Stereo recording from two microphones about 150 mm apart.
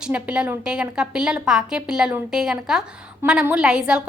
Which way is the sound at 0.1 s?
10° right (ahead or behind).